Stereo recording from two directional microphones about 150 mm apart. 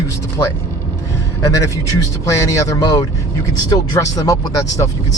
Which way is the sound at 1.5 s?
20° left (ahead or behind).